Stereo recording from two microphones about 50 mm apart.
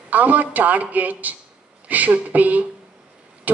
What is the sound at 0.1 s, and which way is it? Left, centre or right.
A woman's voice, right.